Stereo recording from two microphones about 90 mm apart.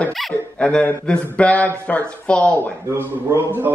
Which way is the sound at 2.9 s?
25° right (ahead or behind).